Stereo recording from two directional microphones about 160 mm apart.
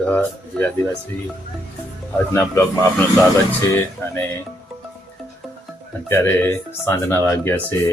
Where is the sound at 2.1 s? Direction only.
20° left (ahead or behind).